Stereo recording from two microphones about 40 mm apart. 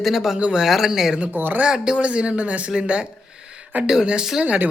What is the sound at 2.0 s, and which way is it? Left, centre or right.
Speech, right.